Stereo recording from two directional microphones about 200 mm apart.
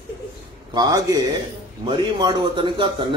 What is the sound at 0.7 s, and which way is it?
Speech, 20° right (ahead or behind).